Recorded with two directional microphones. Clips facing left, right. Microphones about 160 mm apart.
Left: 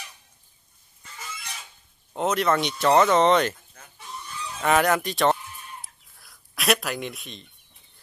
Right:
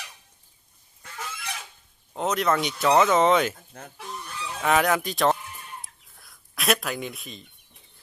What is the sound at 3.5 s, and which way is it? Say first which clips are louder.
Chicken: right 8 dB; 55° right (ahead or behind).